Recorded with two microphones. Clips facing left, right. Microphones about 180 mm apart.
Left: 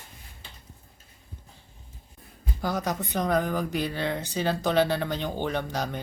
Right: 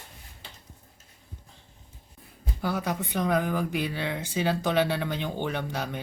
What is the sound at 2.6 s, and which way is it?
Speech, 40° left (ahead or behind).